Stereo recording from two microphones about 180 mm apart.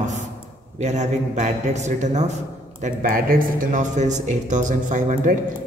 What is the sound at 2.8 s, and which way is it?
Speech, 55° right (ahead or behind).